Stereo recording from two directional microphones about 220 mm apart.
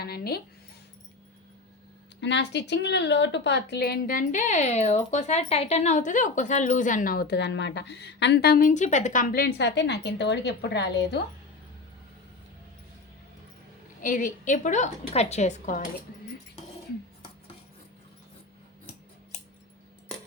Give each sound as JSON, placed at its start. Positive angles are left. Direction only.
{"t": 0.0, "sound": "a sound", "side_deg": 45}
{"t": 2.2, "sound": "a woman's voice", "side_deg": 50}
{"t": 9.6, "sound": "a woman's voice", "side_deg": 50}
{"t": 14.0, "sound": "a woman's voice", "side_deg": 35}